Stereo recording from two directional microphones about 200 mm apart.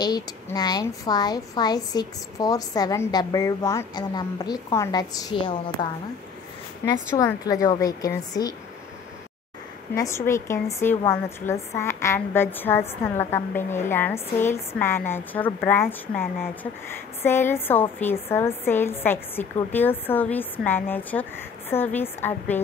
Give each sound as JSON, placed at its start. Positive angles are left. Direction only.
{"t": 0.0, "sound": "a woman's voice", "side_deg": 20}
{"t": 7.2, "sound": "a woman's voice", "side_deg": 15}
{"t": 9.9, "sound": "a woman's voice", "side_deg": 15}